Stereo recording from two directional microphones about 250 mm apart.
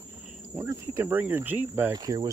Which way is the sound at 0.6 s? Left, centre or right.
Centre.